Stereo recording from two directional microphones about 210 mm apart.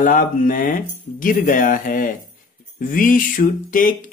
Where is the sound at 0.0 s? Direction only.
40° left (ahead or behind).